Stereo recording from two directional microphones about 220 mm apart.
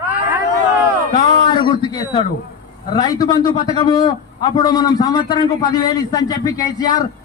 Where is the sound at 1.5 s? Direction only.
20° left (ahead or behind).